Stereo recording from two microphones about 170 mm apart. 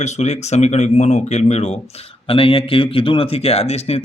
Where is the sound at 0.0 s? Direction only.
40° left (ahead or behind).